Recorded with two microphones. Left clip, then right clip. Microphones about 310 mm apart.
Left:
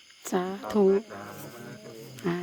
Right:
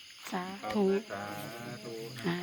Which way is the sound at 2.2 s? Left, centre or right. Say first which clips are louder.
Left 5 dB; centre.